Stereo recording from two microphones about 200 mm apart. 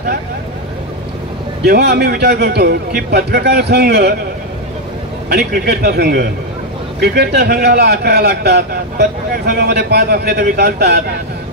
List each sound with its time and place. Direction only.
1.6 s a man's voice: 55° right (ahead or behind)
5.3 s a man's voice: 50° right (ahead or behind)